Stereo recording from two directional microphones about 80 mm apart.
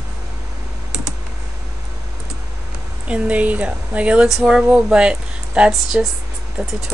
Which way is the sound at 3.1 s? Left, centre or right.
Centre.